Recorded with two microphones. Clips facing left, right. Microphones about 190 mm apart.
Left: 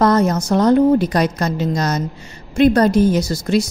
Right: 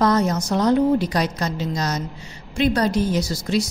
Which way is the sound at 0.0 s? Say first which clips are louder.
Left 4 dB; 50° left (ahead or behind).